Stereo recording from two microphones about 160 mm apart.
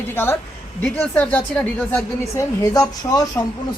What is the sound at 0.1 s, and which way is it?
Speech, 15° left (ahead or behind).